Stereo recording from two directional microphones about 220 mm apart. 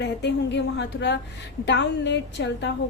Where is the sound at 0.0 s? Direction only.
50° left (ahead or behind).